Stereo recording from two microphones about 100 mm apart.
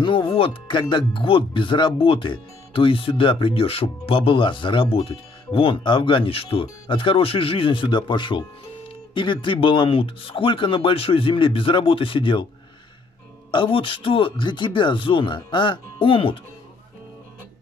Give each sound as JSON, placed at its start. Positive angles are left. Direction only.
{"t": 0.0, "sound": "speech", "side_deg": 60}
{"t": 13.5, "sound": "speech", "side_deg": 55}